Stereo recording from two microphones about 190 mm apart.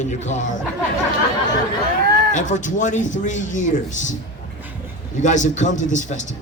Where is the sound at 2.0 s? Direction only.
55° right (ahead or behind).